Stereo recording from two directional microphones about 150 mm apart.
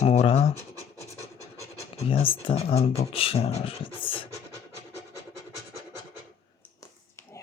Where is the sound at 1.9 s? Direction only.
35° left (ahead or behind).